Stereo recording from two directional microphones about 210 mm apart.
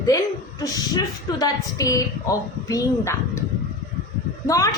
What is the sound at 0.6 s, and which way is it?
A woman's voice, 15° left (ahead or behind).